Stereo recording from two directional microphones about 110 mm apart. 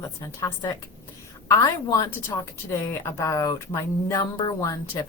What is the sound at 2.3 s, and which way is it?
Speech, 25° left (ahead or behind).